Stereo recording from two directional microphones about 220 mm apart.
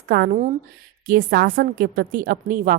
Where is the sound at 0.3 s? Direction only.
30° right (ahead or behind).